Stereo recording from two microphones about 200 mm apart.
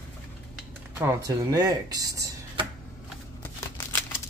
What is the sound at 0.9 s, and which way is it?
Speech, 15° right (ahead or behind).